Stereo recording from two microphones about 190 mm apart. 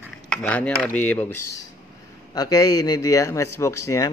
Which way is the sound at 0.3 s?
5° left (ahead or behind).